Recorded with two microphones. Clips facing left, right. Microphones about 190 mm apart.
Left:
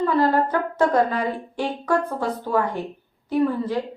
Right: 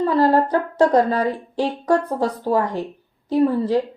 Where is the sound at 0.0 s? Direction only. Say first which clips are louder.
Right 3 dB; 35° right (ahead or behind).